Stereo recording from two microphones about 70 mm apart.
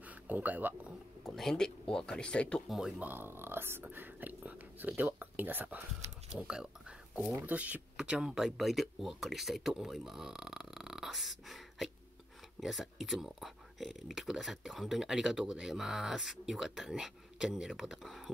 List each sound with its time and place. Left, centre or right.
0.0 s speech: right
1.2 s speech: centre
3.0 s speech: right
6.3 s speech: centre
7.4 s speech: right; by 18.3 s centre